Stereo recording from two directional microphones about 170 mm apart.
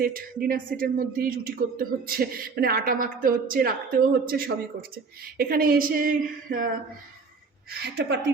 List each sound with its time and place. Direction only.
0.0 s speech: 60° right (ahead or behind)
7.7 s a woman's voice: 75° right (ahead or behind)